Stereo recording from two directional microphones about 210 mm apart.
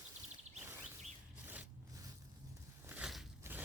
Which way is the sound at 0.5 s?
10° right (ahead or behind).